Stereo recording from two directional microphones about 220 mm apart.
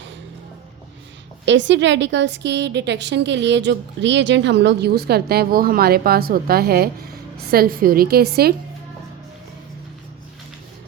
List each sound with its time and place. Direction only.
1.5 s a woman's voice: 55° right (ahead or behind)